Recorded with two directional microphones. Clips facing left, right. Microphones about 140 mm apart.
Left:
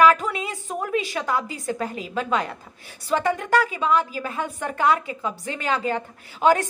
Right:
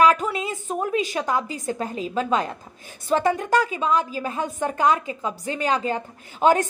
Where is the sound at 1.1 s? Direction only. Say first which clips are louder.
Right 1 dB; 20° right (ahead or behind).